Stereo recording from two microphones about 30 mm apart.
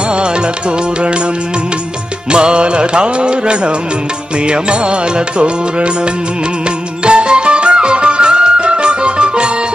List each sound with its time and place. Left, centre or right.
2.3 s music: right
7.1 s music: right